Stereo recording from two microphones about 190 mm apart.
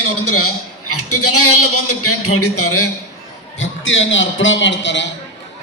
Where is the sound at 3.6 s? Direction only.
85° left.